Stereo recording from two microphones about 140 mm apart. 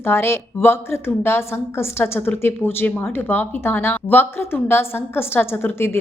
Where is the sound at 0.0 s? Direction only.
15° left (ahead or behind).